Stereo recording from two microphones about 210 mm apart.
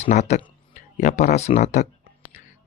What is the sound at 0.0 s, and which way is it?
Speech, 35° left (ahead or behind).